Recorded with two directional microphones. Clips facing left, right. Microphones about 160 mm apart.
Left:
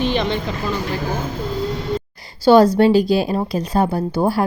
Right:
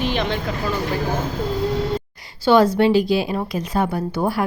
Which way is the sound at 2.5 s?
35° left (ahead or behind).